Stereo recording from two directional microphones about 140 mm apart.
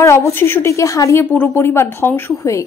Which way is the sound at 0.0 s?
20° left (ahead or behind).